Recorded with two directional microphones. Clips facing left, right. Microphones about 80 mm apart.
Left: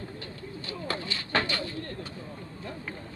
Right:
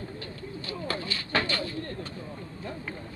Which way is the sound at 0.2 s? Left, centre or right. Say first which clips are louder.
Right 1 dB; left.